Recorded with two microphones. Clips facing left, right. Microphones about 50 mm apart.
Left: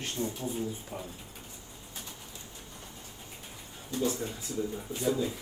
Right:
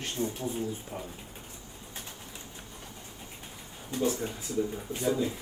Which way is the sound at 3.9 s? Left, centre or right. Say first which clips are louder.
Right 2 dB; right.